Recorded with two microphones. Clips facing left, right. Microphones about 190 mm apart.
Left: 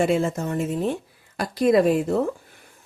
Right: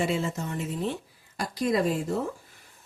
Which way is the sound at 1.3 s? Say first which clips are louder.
Left 8 dB; 60° left (ahead or behind).